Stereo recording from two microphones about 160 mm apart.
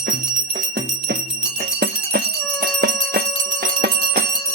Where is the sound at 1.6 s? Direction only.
70° right (ahead or behind).